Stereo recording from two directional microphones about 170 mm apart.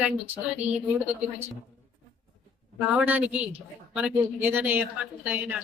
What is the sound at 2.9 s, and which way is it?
A woman's voice, 10° right (ahead or behind).